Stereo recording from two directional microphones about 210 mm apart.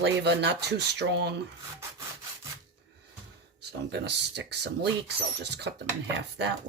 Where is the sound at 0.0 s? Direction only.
55° right (ahead or behind).